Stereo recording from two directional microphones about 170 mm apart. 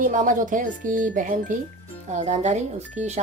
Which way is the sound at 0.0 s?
50° right (ahead or behind).